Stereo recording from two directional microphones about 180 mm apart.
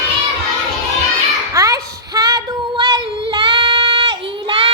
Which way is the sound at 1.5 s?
20° right (ahead or behind).